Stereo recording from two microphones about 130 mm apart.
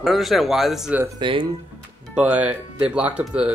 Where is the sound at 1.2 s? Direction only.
35° right (ahead or behind).